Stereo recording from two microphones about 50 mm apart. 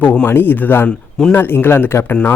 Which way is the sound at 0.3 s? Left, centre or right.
Left.